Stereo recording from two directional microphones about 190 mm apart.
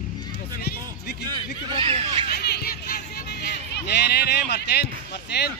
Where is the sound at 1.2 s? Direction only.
25° right (ahead or behind).